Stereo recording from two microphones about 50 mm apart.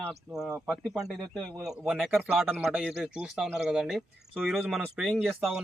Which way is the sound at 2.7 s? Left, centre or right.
Centre.